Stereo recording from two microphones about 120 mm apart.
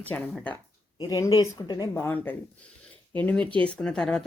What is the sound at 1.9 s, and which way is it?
Speech, 20° left (ahead or behind).